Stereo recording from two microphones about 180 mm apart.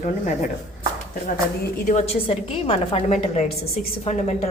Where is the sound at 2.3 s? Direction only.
30° left (ahead or behind).